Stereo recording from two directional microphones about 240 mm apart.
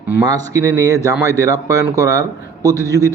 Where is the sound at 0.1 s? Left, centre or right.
Centre.